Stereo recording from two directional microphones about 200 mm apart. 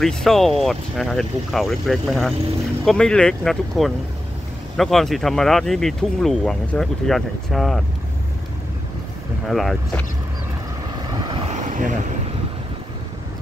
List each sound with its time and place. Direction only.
0.0 s speech: centre (ahead or behind)
9.5 s speech: centre (ahead or behind)
11.1 s vehicle: 20° right (ahead or behind)
11.7 s vehicle: 40° right (ahead or behind)